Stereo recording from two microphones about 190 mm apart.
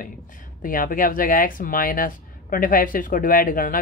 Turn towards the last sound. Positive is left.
turn(degrees=45)  # may be behind; listen again after turning